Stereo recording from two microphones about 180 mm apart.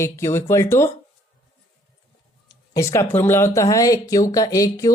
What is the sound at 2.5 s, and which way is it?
Speech, 20° left (ahead or behind).